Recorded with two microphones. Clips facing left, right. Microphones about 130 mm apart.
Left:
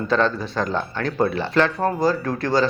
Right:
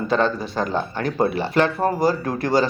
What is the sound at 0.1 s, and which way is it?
Speech, 5° right (ahead or behind).